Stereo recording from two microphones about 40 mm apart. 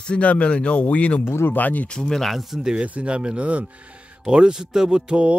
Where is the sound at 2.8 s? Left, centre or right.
Right.